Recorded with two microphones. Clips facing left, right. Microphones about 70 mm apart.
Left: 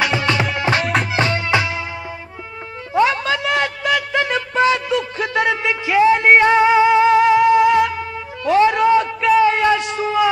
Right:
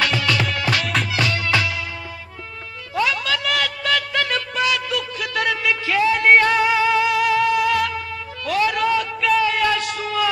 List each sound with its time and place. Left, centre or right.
0.0 s music: left
2.9 s music: left
9.4 s a sound: left